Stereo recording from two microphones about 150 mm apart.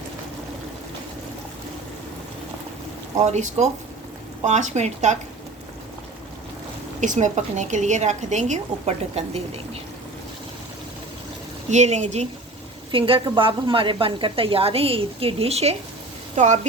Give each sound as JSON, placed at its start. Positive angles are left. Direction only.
{"t": 3.2, "sound": "a woman's voice", "side_deg": -50}
{"t": 7.0, "sound": "a woman's voice", "side_deg": -55}
{"t": 11.7, "sound": "a woman's voice", "side_deg": -50}
{"t": 12.9, "sound": "a woman's voice", "side_deg": -35}